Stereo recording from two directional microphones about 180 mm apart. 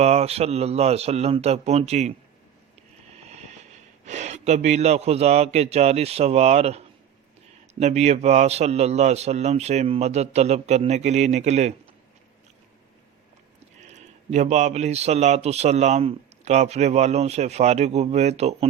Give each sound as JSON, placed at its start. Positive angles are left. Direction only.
{"t": 0.0, "sound": "speech", "side_deg": -35}
{"t": 3.2, "sound": "speech", "side_deg": -35}
{"t": 13.8, "sound": "speech", "side_deg": -40}